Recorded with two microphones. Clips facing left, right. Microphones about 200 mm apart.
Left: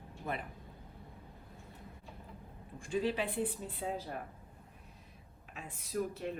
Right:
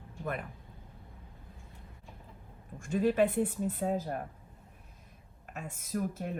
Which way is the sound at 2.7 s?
45° right (ahead or behind).